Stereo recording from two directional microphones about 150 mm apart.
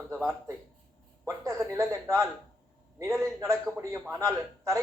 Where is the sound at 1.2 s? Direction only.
20° right (ahead or behind).